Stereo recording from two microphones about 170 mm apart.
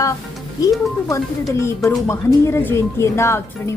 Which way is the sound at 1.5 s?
15° left (ahead or behind).